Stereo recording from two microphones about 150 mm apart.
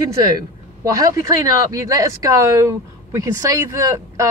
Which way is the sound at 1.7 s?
20° right (ahead or behind).